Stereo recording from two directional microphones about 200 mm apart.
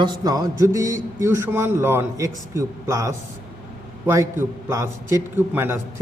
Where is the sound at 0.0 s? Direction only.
20° right (ahead or behind).